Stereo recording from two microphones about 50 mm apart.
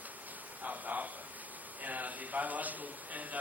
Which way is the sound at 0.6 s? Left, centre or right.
Right.